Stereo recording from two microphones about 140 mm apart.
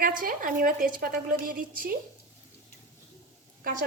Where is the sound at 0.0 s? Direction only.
85° right.